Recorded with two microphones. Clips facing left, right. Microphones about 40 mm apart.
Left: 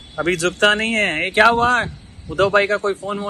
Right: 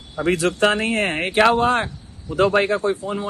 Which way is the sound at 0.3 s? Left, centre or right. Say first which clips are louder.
Left 2 dB; left.